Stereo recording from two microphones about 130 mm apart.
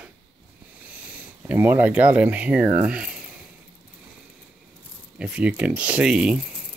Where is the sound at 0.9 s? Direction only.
10° right (ahead or behind).